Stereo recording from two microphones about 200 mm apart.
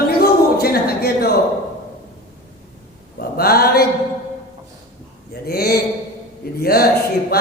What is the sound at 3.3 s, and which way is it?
Speech, 50° left (ahead or behind).